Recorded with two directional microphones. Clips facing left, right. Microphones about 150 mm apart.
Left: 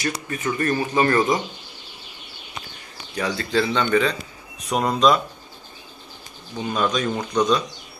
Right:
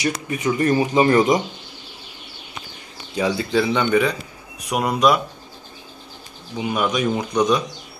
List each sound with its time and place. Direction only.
0.3 s speech: 15° right (ahead or behind)
3.2 s speech: 10° right (ahead or behind)
6.5 s speech: 10° right (ahead or behind)